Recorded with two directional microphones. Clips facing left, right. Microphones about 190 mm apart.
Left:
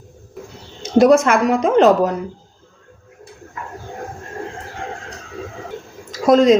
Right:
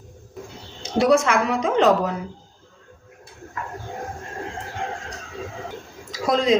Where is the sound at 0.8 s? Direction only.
45° left (ahead or behind).